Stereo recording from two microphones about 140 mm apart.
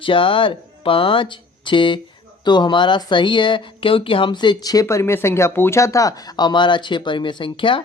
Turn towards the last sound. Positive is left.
turn(degrees=35)  # may be behind; listen again after turning